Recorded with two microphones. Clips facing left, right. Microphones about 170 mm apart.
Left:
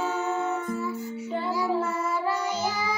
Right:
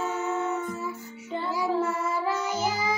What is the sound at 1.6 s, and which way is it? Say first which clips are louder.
Child singing: right 3 dB; 15° right (ahead or behind).